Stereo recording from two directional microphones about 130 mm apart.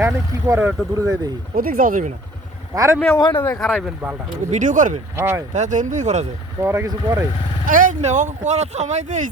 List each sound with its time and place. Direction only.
0.0 s speech: 20° right (ahead or behind)
1.5 s speech: 90° right
2.7 s speech: 25° right (ahead or behind)
3.3 s speech: 15° left (ahead or behind)
3.6 s speech: centre (ahead or behind)
4.5 s speech: 80° right
5.1 s speech: 20° right (ahead or behind)
5.5 s speech: 75° right (ahead or behind)
6.6 s speech: 20° right (ahead or behind)
7.7 s speech: 85° right